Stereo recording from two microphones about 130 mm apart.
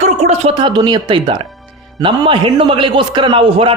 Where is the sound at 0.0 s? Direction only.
60° right (ahead or behind).